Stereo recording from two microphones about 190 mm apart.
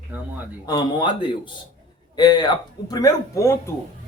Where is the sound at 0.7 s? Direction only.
25° left (ahead or behind).